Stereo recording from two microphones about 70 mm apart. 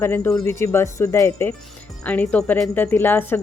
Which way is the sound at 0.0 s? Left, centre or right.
Left.